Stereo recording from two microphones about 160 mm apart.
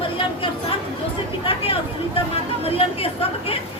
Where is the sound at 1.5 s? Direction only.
35° left (ahead or behind).